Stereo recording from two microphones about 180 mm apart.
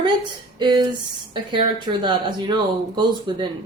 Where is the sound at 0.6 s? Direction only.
25° right (ahead or behind).